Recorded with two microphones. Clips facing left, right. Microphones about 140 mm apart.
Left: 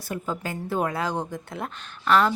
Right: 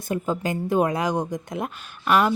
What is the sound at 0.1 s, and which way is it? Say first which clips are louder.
Speech: right 5 dB; 20° right (ahead or behind).